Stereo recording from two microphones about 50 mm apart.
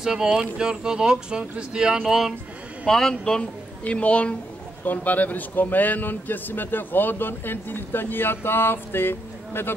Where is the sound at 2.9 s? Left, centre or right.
Centre.